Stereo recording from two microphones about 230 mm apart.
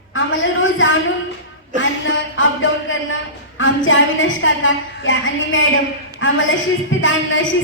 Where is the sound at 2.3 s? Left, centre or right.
Left.